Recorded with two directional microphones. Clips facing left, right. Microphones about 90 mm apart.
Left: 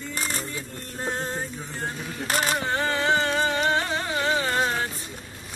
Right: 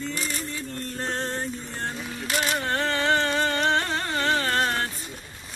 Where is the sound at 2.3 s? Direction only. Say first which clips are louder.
Left 1 dB; 40° left (ahead or behind).